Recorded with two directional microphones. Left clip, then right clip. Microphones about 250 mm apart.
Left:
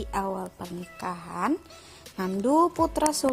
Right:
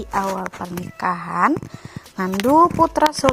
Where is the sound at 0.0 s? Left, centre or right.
Centre.